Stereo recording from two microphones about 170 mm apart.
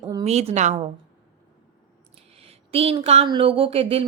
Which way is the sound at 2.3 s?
35° right (ahead or behind).